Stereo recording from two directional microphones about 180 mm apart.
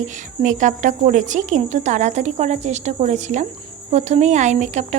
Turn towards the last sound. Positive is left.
turn(degrees=-40)  # may be behind; listen again after turning